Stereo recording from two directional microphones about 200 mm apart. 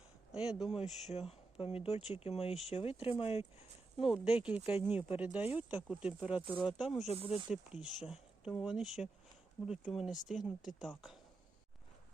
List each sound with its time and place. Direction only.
0.3 s speech: 5° right (ahead or behind)
1.0 s speech: 30° left (ahead or behind)
4.0 s speech: 5° right (ahead or behind)
6.8 s speech: 30° left (ahead or behind)
7.5 s speech: centre (ahead or behind)